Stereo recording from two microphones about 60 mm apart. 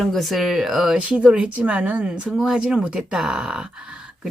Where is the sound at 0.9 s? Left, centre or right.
Centre.